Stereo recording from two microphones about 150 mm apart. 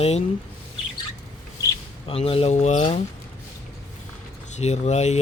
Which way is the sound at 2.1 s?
40° left (ahead or behind).